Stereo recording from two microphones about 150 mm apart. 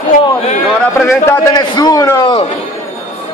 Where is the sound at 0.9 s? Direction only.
20° left (ahead or behind).